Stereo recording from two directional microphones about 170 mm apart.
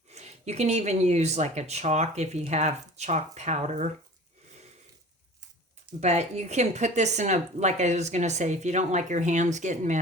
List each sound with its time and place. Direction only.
0.1 s speech: 40° right (ahead or behind)
6.0 s speech: 40° right (ahead or behind)